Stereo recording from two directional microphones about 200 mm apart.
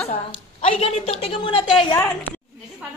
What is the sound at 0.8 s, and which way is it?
Speech, 30° left (ahead or behind).